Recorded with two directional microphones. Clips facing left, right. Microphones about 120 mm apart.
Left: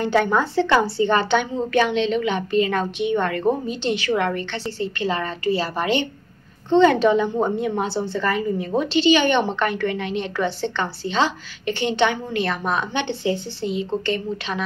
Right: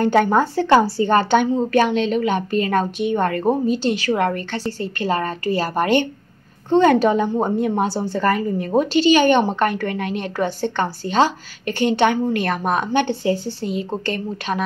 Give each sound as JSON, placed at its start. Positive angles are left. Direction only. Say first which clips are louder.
{"t": 0.0, "sound": "a woman's voice", "louder": "right 3 dB", "side_deg": -45}